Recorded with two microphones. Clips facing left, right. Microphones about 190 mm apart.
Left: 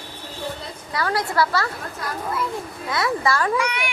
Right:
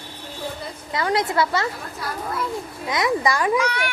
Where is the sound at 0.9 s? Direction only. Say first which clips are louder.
Right 1 dB; 20° right (ahead or behind).